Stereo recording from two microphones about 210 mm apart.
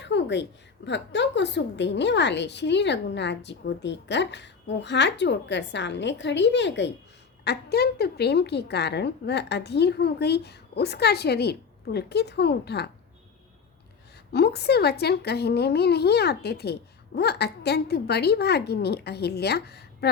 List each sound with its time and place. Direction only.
0.0 s a sound: 55° left (ahead or behind)
0.9 s a woman's voice: 55° left (ahead or behind)
14.3 s a woman's voice: 50° left (ahead or behind)